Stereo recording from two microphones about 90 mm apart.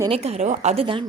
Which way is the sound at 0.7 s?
80° right.